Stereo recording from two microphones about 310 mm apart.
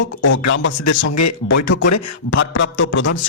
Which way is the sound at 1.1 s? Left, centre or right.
Left.